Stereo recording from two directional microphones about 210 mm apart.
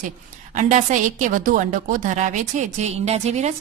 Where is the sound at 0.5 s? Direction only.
35° right (ahead or behind).